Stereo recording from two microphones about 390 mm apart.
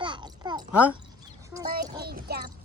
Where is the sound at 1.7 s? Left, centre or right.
Right.